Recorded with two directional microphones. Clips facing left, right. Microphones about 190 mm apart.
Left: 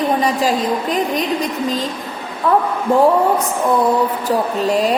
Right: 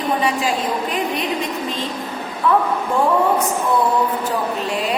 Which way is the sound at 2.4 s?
40° left (ahead or behind).